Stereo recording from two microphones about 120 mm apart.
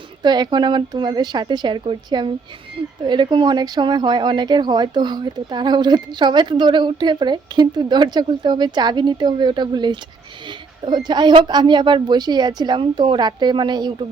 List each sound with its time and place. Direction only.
0.2 s speech: 35° right (ahead or behind)